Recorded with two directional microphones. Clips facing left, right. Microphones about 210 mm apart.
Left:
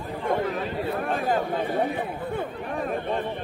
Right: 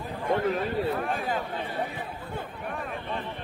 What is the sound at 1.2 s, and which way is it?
Speech, 45° left (ahead or behind).